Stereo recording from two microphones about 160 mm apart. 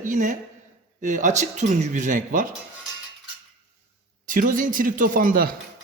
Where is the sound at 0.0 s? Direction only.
50° right (ahead or behind).